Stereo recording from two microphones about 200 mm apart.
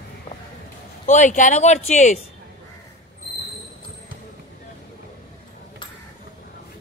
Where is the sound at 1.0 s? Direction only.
35° left (ahead or behind).